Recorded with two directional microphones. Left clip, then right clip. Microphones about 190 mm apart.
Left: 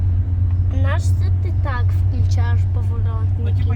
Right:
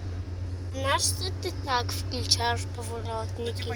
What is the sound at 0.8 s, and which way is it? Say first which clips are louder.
A woman's voice: right 3 dB; 60° right (ahead or behind).